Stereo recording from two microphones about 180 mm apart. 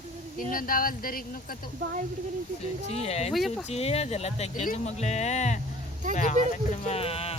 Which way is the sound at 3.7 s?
35° left (ahead or behind).